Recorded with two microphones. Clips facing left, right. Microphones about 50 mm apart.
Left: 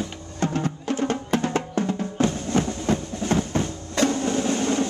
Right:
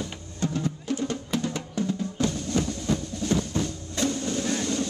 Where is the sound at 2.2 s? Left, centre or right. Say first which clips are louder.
Left 5 dB; left.